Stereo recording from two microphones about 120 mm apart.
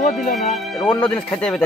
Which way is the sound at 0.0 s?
90° left.